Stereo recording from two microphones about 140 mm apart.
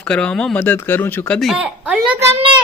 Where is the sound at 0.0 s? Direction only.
10° left (ahead or behind).